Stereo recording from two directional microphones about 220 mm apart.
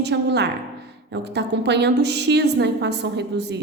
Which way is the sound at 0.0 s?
50° right (ahead or behind).